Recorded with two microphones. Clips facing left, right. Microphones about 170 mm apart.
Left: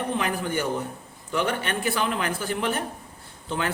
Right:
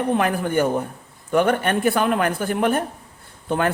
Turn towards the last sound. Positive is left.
turn(degrees=-55)  # may be behind; listen again after turning